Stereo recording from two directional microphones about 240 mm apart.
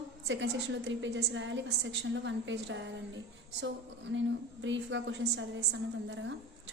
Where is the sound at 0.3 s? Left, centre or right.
Right.